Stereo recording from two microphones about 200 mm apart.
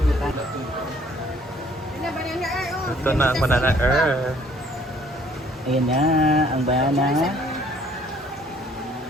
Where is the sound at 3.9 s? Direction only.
Centre (ahead or behind).